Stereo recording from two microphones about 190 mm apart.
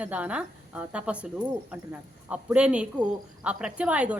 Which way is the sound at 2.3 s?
5° right (ahead or behind).